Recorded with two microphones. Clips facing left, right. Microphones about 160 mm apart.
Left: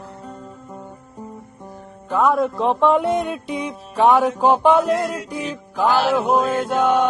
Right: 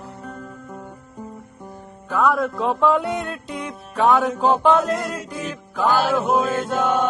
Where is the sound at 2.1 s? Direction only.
25° left (ahead or behind).